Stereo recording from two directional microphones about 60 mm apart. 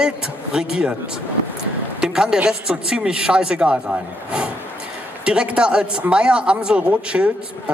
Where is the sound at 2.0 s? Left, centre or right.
Centre.